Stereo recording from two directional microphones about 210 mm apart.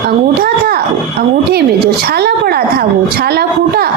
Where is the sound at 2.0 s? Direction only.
50° right (ahead or behind).